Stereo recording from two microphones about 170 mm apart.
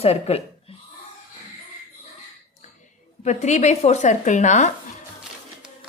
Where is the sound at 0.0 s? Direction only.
35° left (ahead or behind).